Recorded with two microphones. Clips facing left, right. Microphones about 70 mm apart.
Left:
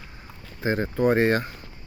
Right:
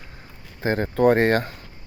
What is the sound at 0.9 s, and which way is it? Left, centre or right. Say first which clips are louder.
Speech: right 4 dB; right.